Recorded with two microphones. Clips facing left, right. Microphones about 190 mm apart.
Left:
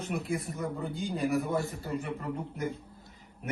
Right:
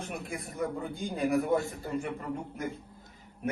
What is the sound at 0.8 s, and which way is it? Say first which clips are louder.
Speech: left 1 dB; 55° right (ahead or behind).